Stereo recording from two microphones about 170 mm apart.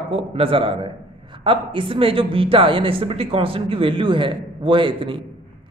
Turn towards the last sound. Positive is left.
turn(degrees=-30)  # may be behind; listen again after turning